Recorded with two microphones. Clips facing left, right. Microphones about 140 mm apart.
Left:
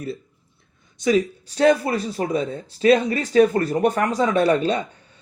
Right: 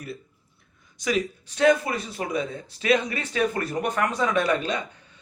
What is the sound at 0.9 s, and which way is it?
Speech, 30° left (ahead or behind).